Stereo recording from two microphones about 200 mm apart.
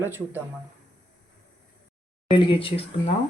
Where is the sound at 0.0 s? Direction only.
10° right (ahead or behind).